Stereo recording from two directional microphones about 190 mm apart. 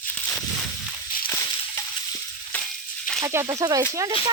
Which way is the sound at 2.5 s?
5° left (ahead or behind).